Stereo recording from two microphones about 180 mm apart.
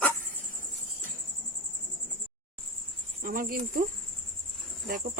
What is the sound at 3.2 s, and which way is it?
Speech, 50° right (ahead or behind).